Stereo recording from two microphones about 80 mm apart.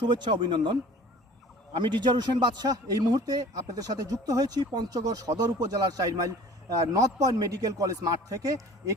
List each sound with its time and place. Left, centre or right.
0.0 s speech: right
1.8 s a man's voice: right